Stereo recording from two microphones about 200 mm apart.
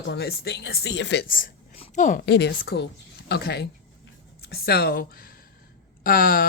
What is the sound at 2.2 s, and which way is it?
A woman's voice, 55° left (ahead or behind).